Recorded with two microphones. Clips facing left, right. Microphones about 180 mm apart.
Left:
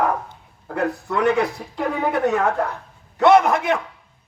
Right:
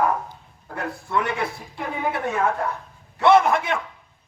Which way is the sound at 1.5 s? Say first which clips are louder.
Left 6 dB; 60° left (ahead or behind).